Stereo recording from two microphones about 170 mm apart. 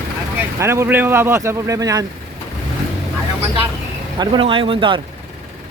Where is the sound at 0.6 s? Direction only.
15° right (ahead or behind).